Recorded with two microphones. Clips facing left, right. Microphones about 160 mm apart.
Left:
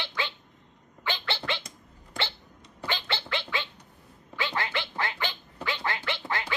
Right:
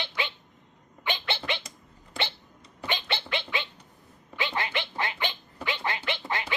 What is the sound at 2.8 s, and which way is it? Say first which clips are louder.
Gargling: right 1 dB; 20° right (ahead or behind).